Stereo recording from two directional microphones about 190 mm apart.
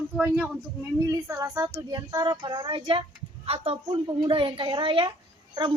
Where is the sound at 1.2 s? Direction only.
15° right (ahead or behind).